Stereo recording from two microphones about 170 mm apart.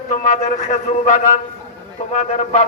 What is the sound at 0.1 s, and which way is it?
A man's voice, 50° left (ahead or behind).